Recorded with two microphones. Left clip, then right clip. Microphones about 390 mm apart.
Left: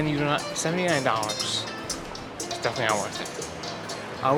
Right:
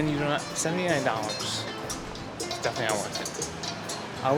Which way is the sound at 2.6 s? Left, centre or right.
Centre.